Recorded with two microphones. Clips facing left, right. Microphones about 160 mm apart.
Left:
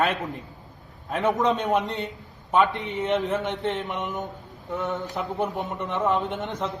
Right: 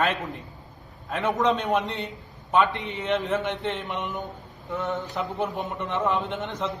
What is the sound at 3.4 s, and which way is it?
Mantra, 45° left (ahead or behind).